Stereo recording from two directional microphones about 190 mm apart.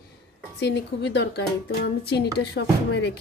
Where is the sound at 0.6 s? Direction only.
60° left (ahead or behind).